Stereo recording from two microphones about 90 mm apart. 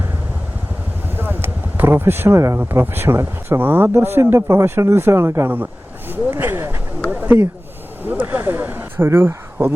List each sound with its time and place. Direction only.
1.1 s vehicle: 25° right (ahead or behind)
2.6 s speech: 20° right (ahead or behind)